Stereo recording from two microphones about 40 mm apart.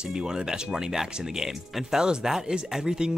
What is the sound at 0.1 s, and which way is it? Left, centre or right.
Speech, centre.